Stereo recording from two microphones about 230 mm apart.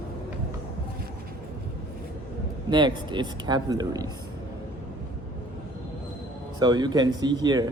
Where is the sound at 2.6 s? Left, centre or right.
Centre.